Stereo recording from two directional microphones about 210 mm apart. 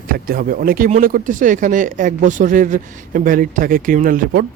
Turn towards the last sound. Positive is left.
turn(degrees=-45)  # may be behind; listen again after turning